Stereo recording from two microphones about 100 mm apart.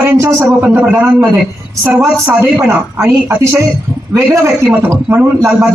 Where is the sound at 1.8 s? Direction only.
20° right (ahead or behind).